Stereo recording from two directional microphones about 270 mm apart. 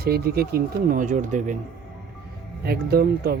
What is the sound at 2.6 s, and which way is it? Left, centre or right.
Speech, right.